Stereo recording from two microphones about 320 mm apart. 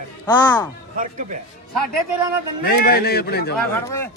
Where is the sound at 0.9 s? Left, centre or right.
Right.